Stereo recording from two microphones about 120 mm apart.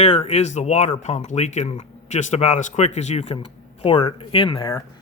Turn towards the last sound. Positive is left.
turn(degrees=45)  # may be behind; listen again after turning